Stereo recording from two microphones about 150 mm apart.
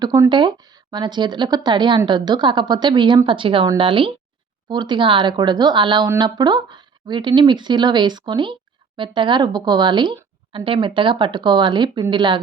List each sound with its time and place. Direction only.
0.0 s a woman's voice: 25° right (ahead or behind)